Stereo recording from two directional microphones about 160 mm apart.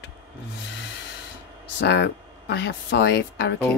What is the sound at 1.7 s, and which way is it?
Speech, 90° left.